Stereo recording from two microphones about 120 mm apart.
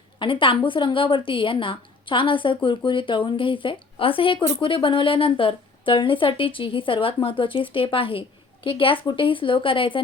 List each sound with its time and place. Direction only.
0.2 s a woman's voice: 45° left (ahead or behind)